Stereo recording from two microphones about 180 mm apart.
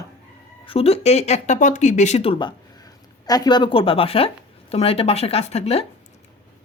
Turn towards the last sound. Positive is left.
turn(degrees=35)  # may be behind; listen again after turning